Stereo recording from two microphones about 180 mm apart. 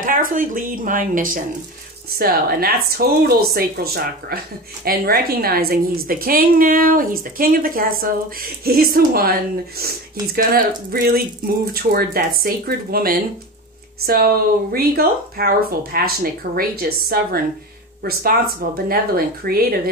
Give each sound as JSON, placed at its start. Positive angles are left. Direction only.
{"t": 0.0, "sound": "a woman's voice", "side_deg": -50}
{"t": 18.9, "sound": "speech", "side_deg": -55}